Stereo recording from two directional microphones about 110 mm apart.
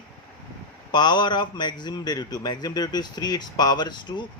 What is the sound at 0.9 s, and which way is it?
A man's voice, 40° left (ahead or behind).